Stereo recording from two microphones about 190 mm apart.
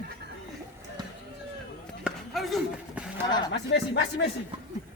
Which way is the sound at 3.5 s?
65° left (ahead or behind).